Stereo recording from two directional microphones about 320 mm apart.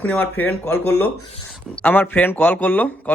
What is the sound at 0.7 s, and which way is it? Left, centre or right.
Speech, left.